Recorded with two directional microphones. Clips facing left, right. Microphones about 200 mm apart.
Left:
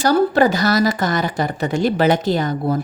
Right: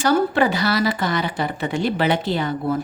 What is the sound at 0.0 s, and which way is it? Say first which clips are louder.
A woman's voice: left 3 dB; 40° left (ahead or behind).